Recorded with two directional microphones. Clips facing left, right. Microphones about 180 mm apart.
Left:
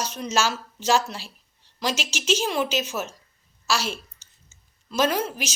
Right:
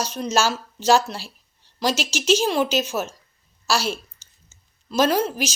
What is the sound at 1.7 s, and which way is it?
A woman's voice, 35° right (ahead or behind).